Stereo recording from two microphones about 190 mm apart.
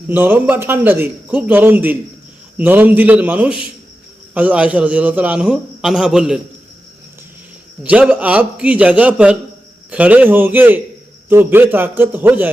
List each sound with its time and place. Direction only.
0.1 s a man's voice: 10° right (ahead or behind)
7.9 s a man's voice: 10° right (ahead or behind)